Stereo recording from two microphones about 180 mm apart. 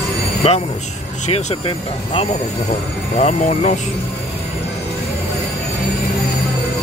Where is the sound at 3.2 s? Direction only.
35° left (ahead or behind).